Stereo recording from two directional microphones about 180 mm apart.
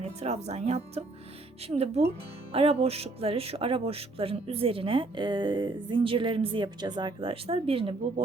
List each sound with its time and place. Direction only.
0.0 s speech: 35° right (ahead or behind)